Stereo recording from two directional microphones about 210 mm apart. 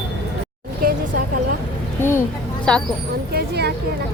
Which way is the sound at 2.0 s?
10° left (ahead or behind).